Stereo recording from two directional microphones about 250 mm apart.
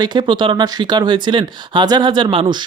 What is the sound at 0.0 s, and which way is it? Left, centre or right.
Speech, centre.